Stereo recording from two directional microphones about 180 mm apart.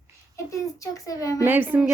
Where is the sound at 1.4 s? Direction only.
10° right (ahead or behind).